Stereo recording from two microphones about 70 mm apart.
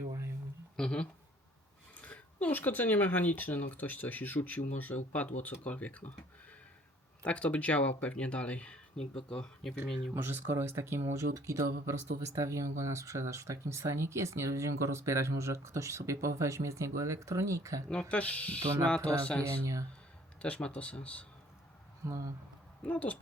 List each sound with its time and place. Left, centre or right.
0.8 s speech: centre
2.0 s speech: left
7.2 s speech: centre
10.2 s speech: right
18.1 s speech: centre
19.5 s speech: right
20.4 s speech: centre
22.0 s speech: right
22.8 s speech: left